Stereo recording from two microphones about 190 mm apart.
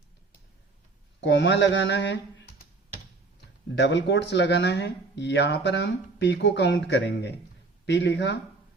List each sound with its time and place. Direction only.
1.2 s mantra: 70° left (ahead or behind)
3.8 s speech: 65° left (ahead or behind)